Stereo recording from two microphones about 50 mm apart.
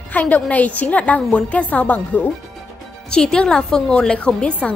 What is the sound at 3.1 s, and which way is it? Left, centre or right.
A woman's voice, centre.